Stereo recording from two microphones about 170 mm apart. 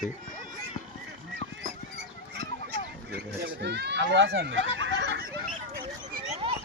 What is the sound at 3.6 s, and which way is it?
Speech, 80° right.